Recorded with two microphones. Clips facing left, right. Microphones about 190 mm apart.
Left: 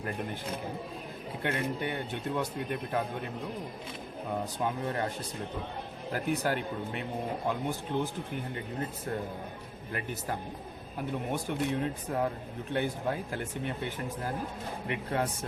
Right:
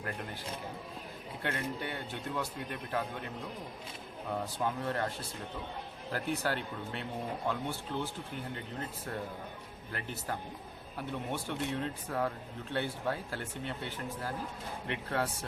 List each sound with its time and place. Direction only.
1.4 s speech: 20° left (ahead or behind)
4.3 s speech: 15° left (ahead or behind)
9.9 s speech: 15° left (ahead or behind)